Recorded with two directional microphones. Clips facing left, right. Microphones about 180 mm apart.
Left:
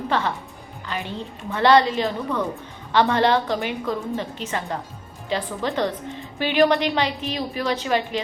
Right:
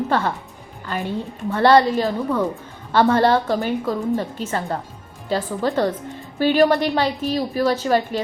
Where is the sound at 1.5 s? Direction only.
45° right (ahead or behind).